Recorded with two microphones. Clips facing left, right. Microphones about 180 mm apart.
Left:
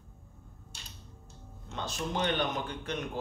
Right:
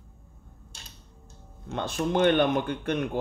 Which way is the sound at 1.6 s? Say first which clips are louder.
Right 8 dB; 55° right (ahead or behind).